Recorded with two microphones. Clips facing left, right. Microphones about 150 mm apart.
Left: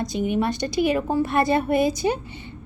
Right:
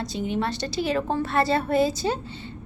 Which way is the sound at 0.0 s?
15° left (ahead or behind).